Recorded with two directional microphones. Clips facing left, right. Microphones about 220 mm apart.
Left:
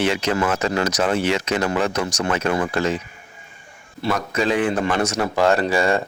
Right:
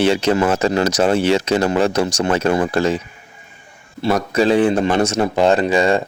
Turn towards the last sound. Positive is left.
turn(degrees=-20)  # may be behind; listen again after turning